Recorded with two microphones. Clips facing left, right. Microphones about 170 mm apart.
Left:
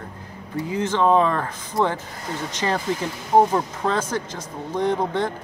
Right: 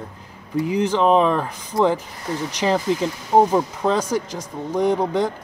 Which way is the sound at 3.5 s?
15° right (ahead or behind).